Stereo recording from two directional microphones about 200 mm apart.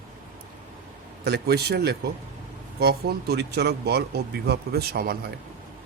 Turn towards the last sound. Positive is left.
turn(degrees=-50)  # may be behind; listen again after turning